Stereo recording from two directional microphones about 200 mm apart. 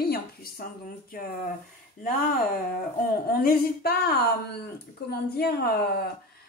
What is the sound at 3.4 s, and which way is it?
A woman's voice, 50° left (ahead or behind).